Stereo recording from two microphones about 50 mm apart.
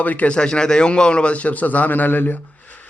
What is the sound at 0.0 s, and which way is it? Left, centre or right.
Speech, left.